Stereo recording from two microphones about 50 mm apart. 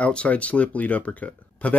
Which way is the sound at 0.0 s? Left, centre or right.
Left.